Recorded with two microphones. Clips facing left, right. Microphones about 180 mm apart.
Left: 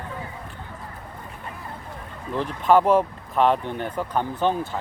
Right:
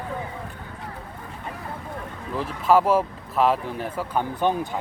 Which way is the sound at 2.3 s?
5° right (ahead or behind).